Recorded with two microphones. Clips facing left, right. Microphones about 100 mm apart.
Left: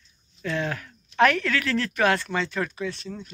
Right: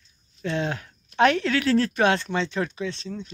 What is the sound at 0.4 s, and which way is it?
Speech, 30° right (ahead or behind).